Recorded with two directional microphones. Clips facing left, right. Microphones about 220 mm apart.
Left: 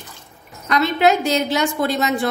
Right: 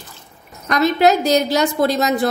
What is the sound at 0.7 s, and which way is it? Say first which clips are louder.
A woman's voice: right 2 dB; 40° right (ahead or behind).